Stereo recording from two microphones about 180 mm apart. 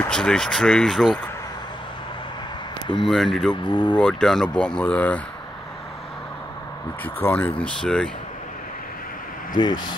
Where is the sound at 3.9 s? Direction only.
5° left (ahead or behind).